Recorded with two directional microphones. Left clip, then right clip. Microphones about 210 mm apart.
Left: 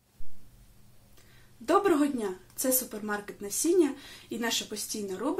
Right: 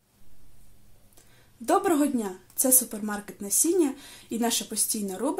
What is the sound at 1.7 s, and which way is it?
Speech, 45° right (ahead or behind).